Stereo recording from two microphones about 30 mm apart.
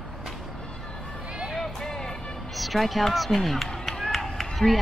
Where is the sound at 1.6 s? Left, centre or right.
Centre.